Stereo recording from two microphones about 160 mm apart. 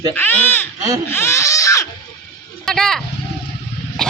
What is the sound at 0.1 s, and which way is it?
Speech, 15° left (ahead or behind).